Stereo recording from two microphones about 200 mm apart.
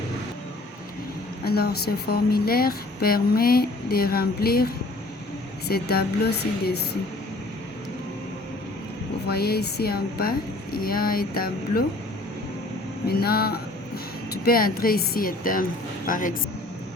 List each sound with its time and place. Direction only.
1.5 s speech: 50° left (ahead or behind)
9.2 s speech: 50° left (ahead or behind)
13.1 s a sound: 50° left (ahead or behind)
14.4 s a man's voice: 45° left (ahead or behind)